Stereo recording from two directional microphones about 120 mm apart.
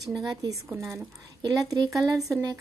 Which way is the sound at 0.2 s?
35° right (ahead or behind).